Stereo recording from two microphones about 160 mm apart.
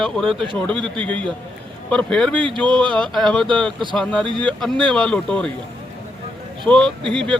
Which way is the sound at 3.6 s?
5° left (ahead or behind).